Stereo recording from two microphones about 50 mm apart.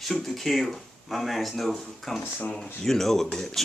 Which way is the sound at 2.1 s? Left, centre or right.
Centre.